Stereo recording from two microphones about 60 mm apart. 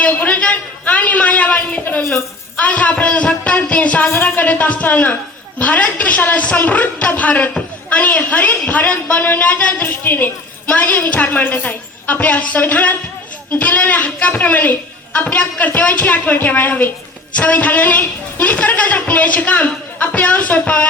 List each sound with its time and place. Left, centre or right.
0.0 s a sound: left
1.8 s a woman's voice: left
2.6 s a woman's voice: left
9.8 s a woman's voice: left